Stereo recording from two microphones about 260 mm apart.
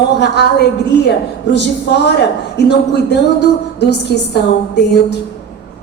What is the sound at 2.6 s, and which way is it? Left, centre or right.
A woman's voice, left.